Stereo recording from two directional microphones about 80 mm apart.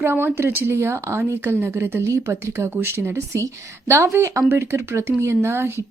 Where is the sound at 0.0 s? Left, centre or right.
Right.